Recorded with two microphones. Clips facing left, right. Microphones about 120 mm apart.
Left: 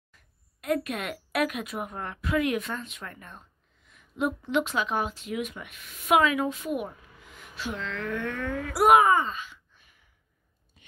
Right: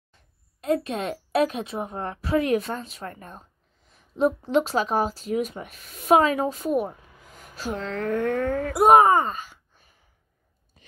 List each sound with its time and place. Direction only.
0.1 s a woman's voice: 30° right (ahead or behind); by 8.7 s 45° right (ahead or behind)
8.9 s wail: 40° right (ahead or behind)